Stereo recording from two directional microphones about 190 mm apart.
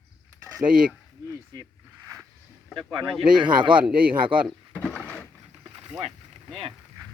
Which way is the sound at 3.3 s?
25° right (ahead or behind).